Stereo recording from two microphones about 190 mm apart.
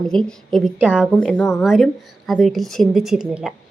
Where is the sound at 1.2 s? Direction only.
5° left (ahead or behind).